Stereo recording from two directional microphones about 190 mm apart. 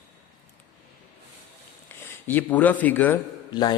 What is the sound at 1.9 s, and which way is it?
Speech, 10° left (ahead or behind).